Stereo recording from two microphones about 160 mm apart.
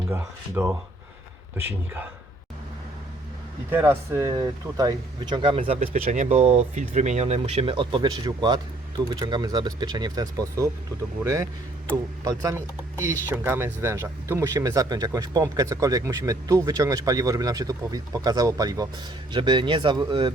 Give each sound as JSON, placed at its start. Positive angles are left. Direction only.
{"t": 0.1, "sound": "speech", "side_deg": -15}
{"t": 3.7, "sound": "speech", "side_deg": -15}